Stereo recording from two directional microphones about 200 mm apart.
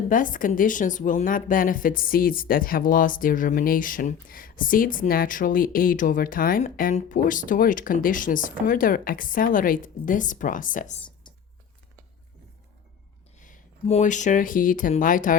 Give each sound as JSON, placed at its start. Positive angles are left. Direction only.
{"t": 0.1, "sound": "a woman's voice", "side_deg": 40}
{"t": 13.4, "sound": "speech", "side_deg": 35}